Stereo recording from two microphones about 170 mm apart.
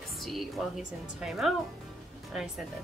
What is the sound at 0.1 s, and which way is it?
A woman's voice, centre (ahead or behind).